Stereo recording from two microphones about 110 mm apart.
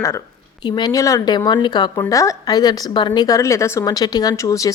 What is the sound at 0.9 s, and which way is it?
A woman's voice, 30° left (ahead or behind).